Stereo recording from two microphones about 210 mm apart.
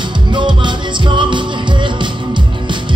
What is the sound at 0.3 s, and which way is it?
Music, 20° right (ahead or behind).